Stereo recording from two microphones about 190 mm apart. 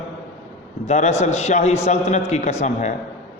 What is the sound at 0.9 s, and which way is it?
A man's voice, 35° left (ahead or behind).